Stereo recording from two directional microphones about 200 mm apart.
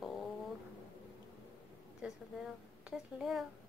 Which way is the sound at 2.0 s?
5° right (ahead or behind).